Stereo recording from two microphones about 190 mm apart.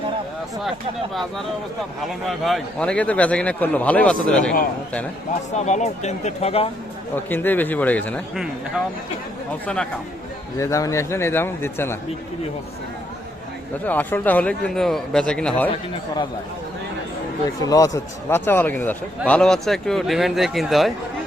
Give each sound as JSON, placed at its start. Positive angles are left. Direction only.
{"t": 2.2, "sound": "a man's voice", "side_deg": 0}
{"t": 5.5, "sound": "speech", "side_deg": 35}
{"t": 7.3, "sound": "a man's voice", "side_deg": 10}
{"t": 10.6, "sound": "a man's voice", "side_deg": 15}
{"t": 13.8, "sound": "a man's voice", "side_deg": 10}
{"t": 17.7, "sound": "a man's voice", "side_deg": 15}